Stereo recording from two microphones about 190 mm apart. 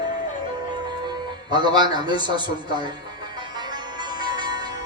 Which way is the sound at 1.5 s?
25° right (ahead or behind).